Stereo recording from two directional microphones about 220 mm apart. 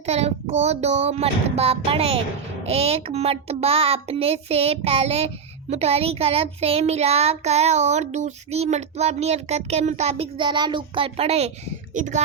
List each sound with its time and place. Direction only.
0.0 s child singing: 30° right (ahead or behind)